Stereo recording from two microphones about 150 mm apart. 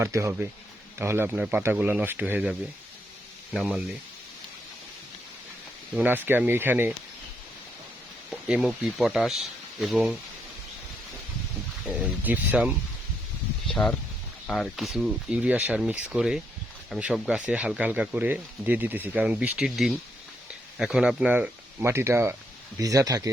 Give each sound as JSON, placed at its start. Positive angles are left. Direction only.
{"t": 0.0, "sound": "speech", "side_deg": -20}
{"t": 5.9, "sound": "speech", "side_deg": -10}
{"t": 8.3, "sound": "speech", "side_deg": -5}
{"t": 11.9, "sound": "speech", "side_deg": -10}
{"t": 13.7, "sound": "speech", "side_deg": 5}